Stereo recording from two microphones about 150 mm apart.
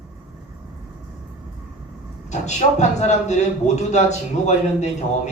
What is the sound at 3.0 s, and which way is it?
Speech, 50° left (ahead or behind).